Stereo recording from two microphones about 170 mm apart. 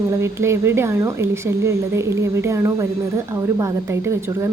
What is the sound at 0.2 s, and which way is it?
Speech, 15° right (ahead or behind).